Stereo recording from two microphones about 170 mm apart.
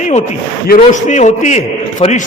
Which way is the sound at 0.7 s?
60° left (ahead or behind).